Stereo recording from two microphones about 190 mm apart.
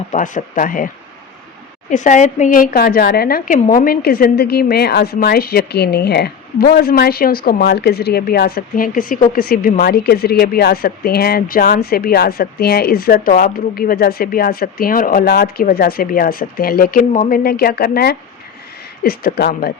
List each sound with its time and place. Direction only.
0.1 s a woman's voice: 40° left (ahead or behind)
1.9 s a woman's voice: 40° left (ahead or behind)